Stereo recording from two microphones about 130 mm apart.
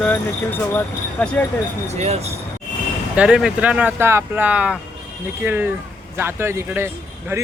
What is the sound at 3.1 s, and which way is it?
Speech, 5° right (ahead or behind).